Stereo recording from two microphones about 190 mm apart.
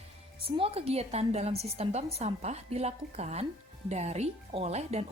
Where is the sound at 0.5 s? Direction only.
30° right (ahead or behind).